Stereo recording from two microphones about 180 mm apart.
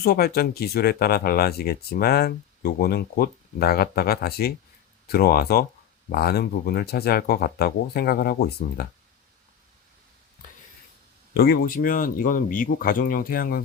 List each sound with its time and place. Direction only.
0.0 s speech: 55° left (ahead or behind)
11.3 s speech: 60° left (ahead or behind)